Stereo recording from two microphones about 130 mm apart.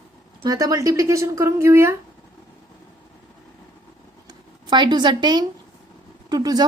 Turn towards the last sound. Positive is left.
turn(degrees=-30)  # may be behind; listen again after turning